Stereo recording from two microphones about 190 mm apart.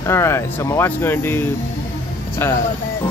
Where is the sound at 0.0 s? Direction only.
15° left (ahead or behind).